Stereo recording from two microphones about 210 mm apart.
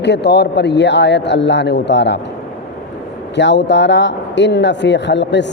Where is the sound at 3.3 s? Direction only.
55° left (ahead or behind).